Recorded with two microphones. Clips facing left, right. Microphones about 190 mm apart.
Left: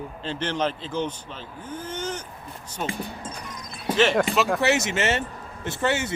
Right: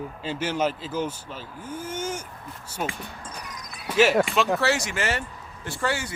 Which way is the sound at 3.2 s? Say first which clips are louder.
Left 3 dB; 25° left (ahead or behind).